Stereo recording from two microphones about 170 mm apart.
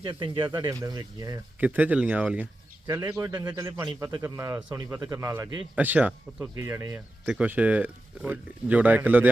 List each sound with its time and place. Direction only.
0.0 s speech: 30° right (ahead or behind)
1.5 s speech: 10° right (ahead or behind)
2.8 s a man's voice: 20° right (ahead or behind)